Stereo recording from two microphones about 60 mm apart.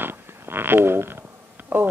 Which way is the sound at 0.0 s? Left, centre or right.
Right.